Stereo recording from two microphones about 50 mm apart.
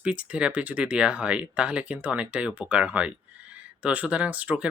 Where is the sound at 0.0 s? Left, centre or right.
Right.